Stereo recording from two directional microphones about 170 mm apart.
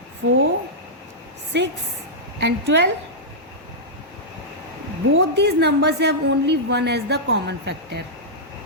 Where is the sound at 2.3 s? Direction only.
90° right.